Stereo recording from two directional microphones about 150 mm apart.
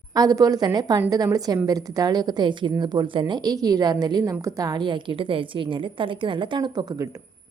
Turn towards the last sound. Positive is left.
turn(degrees=-25)  # may be behind; listen again after turning